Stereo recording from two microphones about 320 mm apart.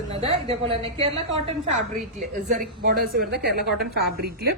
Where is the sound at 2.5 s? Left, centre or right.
Right.